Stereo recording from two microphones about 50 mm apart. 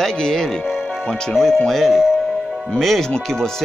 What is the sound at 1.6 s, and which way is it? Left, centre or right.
Speech, centre.